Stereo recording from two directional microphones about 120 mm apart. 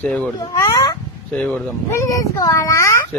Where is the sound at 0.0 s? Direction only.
15° left (ahead or behind).